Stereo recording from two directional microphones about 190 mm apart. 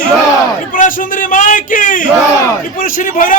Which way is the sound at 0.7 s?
45° left (ahead or behind).